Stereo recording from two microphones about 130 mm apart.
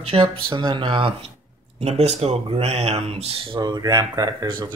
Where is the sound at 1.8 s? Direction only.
55° right (ahead or behind).